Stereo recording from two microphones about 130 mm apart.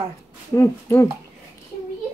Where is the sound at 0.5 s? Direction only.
25° left (ahead or behind).